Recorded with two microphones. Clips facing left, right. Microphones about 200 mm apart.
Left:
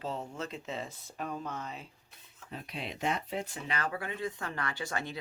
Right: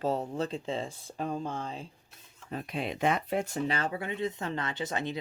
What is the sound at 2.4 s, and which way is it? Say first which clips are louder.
Speech: right 7 dB; 50° right (ahead or behind).